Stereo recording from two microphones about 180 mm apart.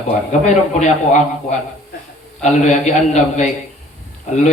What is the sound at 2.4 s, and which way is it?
A man's voice, 40° left (ahead or behind).